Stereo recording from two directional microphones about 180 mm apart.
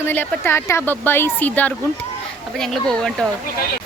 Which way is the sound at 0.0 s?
10° left (ahead or behind).